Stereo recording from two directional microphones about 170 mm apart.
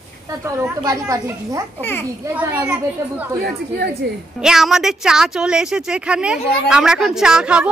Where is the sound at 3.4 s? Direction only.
65° right (ahead or behind).